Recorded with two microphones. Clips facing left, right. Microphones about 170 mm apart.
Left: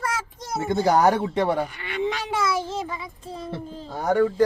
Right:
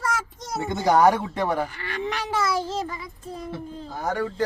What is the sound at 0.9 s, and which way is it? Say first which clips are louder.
A woman's voice: right 3 dB; 30° left (ahead or behind).